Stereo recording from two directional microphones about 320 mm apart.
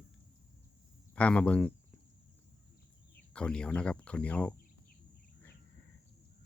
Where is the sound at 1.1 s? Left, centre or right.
Centre.